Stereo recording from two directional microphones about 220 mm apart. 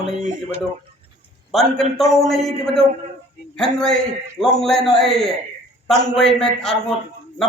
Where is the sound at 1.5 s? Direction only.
Centre (ahead or behind).